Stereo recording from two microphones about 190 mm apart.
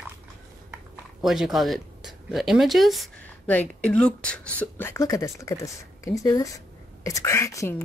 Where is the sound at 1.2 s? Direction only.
Centre (ahead or behind).